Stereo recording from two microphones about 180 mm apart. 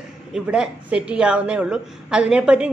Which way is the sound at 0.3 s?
5° right (ahead or behind).